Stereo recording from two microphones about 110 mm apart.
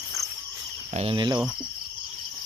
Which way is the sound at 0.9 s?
70° right (ahead or behind).